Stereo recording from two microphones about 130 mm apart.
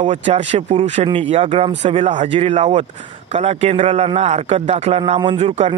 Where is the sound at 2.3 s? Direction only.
50° right (ahead or behind).